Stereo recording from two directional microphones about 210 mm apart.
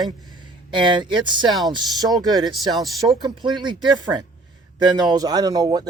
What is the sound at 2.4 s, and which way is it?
Speech, centre (ahead or behind).